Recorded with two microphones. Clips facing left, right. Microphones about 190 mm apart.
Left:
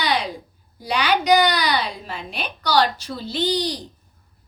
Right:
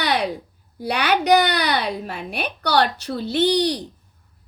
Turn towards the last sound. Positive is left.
turn(degrees=-65)  # may be behind; listen again after turning